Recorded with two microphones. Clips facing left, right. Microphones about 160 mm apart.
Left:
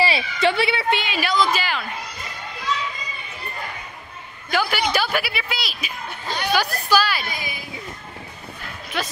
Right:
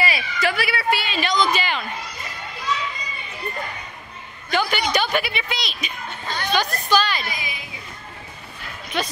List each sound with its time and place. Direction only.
0.0 s a woman's voice: 30° left (ahead or behind); by 1.9 s centre (ahead or behind)
4.5 s a woman's voice: 5° left (ahead or behind)
8.9 s speech: 5° left (ahead or behind)